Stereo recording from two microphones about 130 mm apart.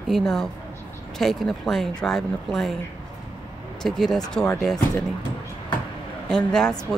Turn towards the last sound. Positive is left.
turn(degrees=5)  # may be behind; listen again after turning